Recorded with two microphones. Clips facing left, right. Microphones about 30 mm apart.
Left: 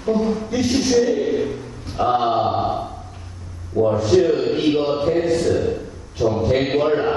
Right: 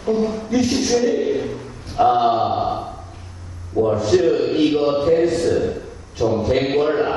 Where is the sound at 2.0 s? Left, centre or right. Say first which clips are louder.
Right 1 dB; centre.